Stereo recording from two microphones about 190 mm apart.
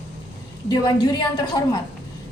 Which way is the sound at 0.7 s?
20° left (ahead or behind).